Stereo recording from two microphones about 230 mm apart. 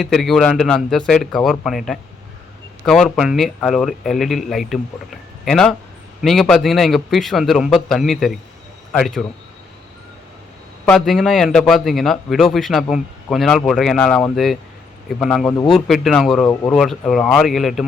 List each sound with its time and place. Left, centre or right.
0.0 s a man's voice: centre
10.8 s a man's voice: centre